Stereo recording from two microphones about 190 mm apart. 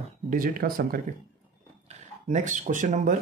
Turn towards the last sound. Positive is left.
turn(degrees=-40)  # may be behind; listen again after turning